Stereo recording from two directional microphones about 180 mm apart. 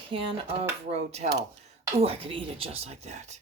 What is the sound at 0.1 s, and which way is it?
Speech, 30° right (ahead or behind).